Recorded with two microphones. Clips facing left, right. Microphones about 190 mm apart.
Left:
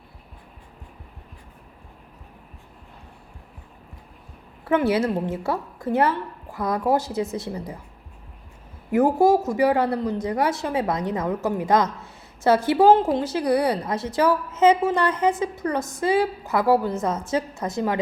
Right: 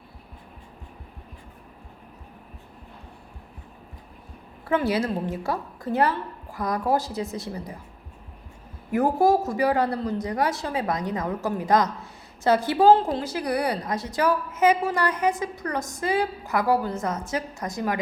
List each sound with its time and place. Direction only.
4.7 s a woman's voice: 20° left (ahead or behind)
8.9 s a woman's voice: 20° left (ahead or behind)